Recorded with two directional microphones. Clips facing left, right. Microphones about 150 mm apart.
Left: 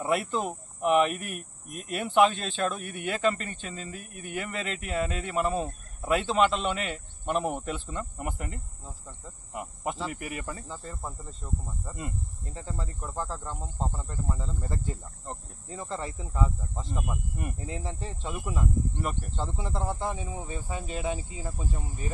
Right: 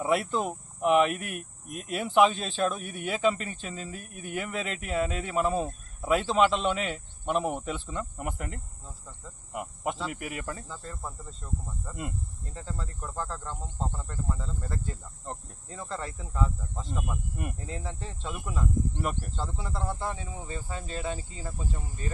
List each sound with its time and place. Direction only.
0.0 s speech: centre (ahead or behind)
9.5 s cricket: centre (ahead or behind)
10.1 s speech: centre (ahead or behind)
10.7 s speech: 15° left (ahead or behind)
12.5 s speech: 15° left (ahead or behind)